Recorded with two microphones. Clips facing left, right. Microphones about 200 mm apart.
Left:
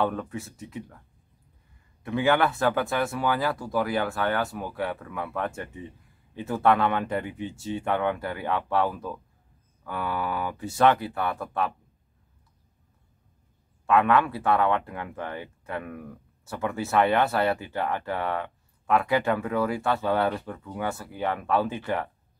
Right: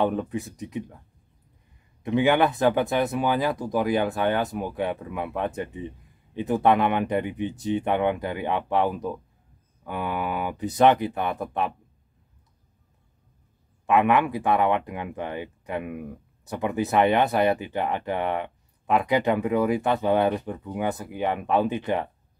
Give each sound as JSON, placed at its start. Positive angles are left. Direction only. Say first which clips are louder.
{"t": 0.0, "sound": "speech", "louder": "right 3 dB", "side_deg": -20}
{"t": 2.0, "sound": "speech", "louder": "right 3 dB", "side_deg": -20}
{"t": 13.8, "sound": "speech", "louder": "right 1 dB", "side_deg": -15}